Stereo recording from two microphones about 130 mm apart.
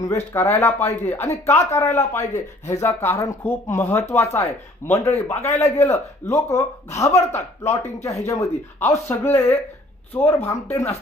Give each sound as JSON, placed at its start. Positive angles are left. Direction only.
{"t": 0.0, "sound": "a man's voice", "side_deg": 25}